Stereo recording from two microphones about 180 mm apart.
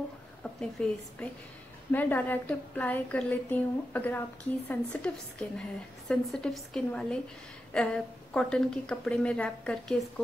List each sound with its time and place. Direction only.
0.4 s a woman's voice: 5° left (ahead or behind)